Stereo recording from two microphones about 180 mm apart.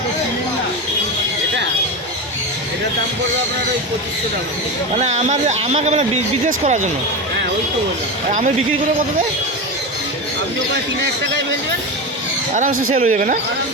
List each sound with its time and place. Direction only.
4.9 s speech: 40° right (ahead or behind)
8.3 s speech: 45° right (ahead or behind)
12.5 s speech: 45° right (ahead or behind)